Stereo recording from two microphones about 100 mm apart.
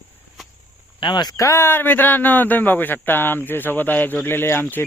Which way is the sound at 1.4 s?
25° left (ahead or behind).